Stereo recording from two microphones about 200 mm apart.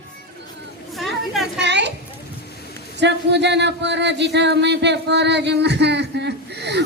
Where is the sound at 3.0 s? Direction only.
60° right (ahead or behind).